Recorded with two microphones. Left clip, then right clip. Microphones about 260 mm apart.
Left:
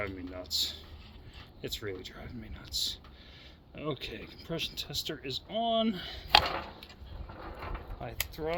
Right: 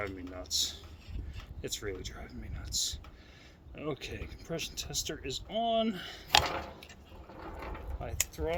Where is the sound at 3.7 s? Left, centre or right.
Left.